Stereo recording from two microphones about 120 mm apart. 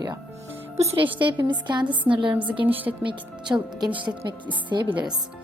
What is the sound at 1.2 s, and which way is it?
A woman's voice, 40° right (ahead or behind).